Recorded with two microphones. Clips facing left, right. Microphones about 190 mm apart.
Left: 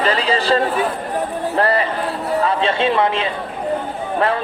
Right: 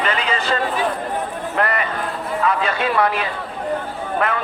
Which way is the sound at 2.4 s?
30° left (ahead or behind).